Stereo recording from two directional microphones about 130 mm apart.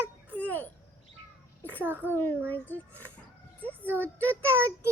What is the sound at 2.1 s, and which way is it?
Speech, 15° left (ahead or behind).